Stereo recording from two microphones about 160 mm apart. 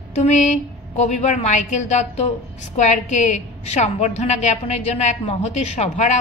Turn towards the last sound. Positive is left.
turn(degrees=45)  # may be behind; listen again after turning